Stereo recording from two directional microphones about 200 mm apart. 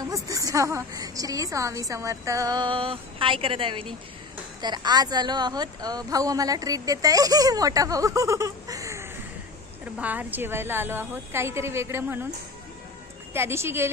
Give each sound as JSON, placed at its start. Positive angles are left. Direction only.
{"t": 0.0, "sound": "a woman's voice", "side_deg": -15}
{"t": 13.3, "sound": "speech", "side_deg": -10}